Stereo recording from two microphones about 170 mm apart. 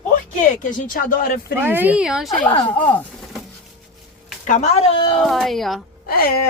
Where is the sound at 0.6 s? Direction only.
55° left (ahead or behind).